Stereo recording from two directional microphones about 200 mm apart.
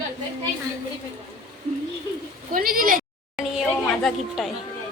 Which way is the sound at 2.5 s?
45° right (ahead or behind).